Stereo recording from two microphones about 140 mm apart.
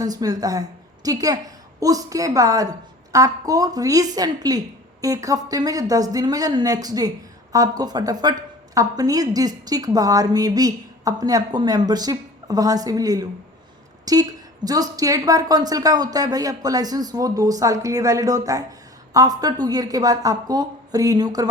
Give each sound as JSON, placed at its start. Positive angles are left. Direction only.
{"t": 0.0, "sound": "a woman's voice", "side_deg": -25}